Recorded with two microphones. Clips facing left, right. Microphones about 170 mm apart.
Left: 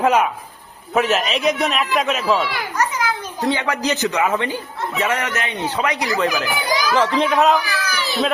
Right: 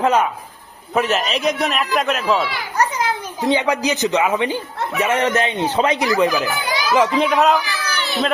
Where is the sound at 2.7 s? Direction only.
30° right (ahead or behind).